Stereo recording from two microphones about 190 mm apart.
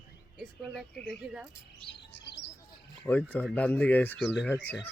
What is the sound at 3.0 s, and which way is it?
Speech, 10° left (ahead or behind).